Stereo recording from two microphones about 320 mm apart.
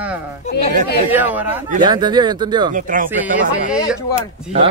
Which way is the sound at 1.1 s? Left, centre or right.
Centre.